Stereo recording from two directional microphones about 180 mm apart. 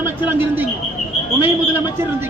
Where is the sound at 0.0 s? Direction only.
10° right (ahead or behind).